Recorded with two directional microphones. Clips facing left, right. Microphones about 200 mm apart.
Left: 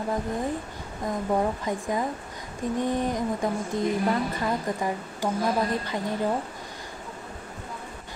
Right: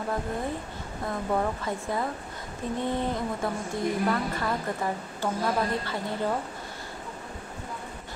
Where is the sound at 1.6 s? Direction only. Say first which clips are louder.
Left 2 dB; 15° left (ahead or behind).